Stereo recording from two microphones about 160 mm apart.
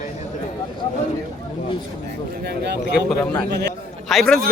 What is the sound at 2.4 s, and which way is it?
Speech, 90° right.